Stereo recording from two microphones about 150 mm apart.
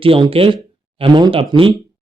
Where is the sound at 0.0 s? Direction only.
35° right (ahead or behind).